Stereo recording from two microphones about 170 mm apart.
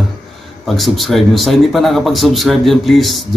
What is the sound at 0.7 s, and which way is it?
A man's voice, centre (ahead or behind).